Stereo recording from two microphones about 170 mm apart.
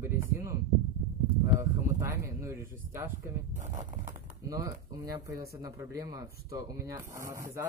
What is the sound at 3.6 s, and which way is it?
Speech, 45° right (ahead or behind).